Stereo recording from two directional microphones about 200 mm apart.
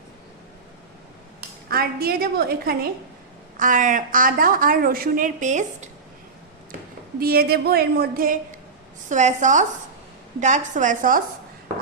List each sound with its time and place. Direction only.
1.7 s a woman's voice: 50° right (ahead or behind)
7.2 s a woman's voice: 50° right (ahead or behind)